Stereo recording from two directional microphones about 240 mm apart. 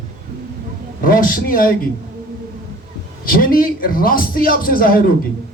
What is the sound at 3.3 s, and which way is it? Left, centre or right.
A man's voice, left.